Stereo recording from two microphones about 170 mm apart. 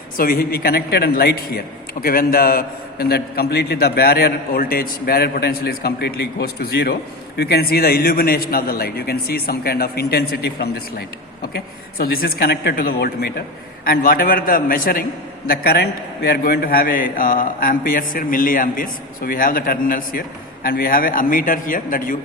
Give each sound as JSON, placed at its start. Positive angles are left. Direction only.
{"t": 0.2, "sound": "a man's voice", "side_deg": 60}